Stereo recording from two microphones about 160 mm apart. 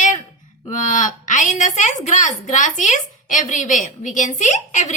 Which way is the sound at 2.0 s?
50° left (ahead or behind).